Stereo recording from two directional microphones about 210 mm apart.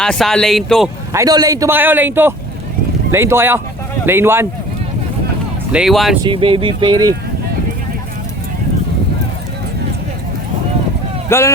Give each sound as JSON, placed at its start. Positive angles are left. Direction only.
{"t": 0.0, "sound": "speech", "side_deg": 0}
{"t": 1.1, "sound": "a man's voice", "side_deg": -15}
{"t": 5.7, "sound": "speech", "side_deg": 0}
{"t": 6.2, "sound": "speech", "side_deg": -25}
{"t": 11.3, "sound": "speech", "side_deg": 10}